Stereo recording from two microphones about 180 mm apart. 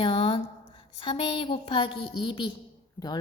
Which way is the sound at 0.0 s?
30° left (ahead or behind).